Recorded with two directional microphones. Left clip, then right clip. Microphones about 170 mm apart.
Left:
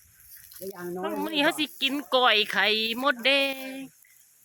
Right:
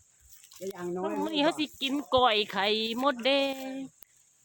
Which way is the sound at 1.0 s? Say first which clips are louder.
Left 3 dB; centre (ahead or behind).